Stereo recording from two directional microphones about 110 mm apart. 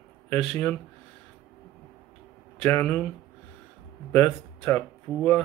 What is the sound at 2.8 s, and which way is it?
Speech, 15° left (ahead or behind).